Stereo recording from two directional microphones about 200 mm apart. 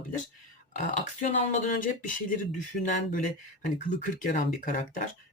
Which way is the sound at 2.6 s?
40° left (ahead or behind).